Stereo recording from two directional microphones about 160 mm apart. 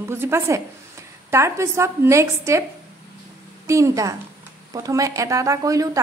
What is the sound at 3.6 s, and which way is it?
Speech, 20° right (ahead or behind).